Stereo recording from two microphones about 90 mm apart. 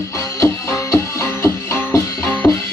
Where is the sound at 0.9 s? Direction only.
30° left (ahead or behind).